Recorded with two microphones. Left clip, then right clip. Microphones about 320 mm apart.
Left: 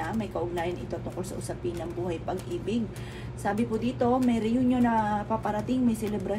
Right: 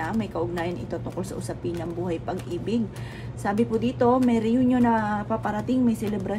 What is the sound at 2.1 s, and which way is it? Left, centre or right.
A woman's voice, right.